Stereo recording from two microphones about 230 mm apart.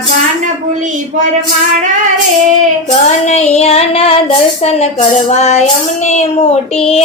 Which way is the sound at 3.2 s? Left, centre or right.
Left.